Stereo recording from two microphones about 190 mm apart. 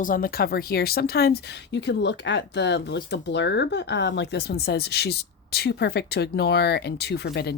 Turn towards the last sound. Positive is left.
turn(degrees=60)  # may be behind; listen again after turning